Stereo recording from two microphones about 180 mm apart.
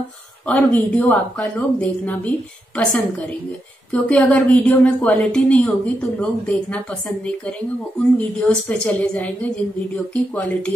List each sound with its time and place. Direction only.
0.5 s a woman's voice: 10° left (ahead or behind)